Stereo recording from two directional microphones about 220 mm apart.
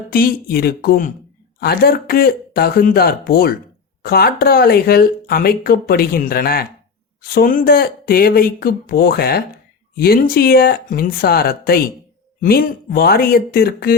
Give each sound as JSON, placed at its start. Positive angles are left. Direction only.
{"t": 0.1, "sound": "speech", "side_deg": 45}